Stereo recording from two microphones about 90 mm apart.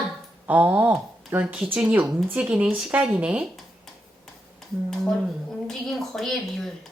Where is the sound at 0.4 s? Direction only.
20° right (ahead or behind).